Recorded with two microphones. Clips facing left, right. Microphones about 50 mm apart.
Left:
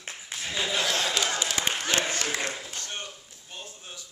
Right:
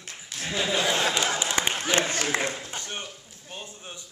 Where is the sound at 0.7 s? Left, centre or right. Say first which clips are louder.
Right 3 dB; centre.